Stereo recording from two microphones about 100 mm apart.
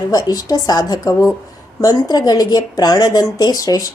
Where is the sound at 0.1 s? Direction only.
40° left (ahead or behind).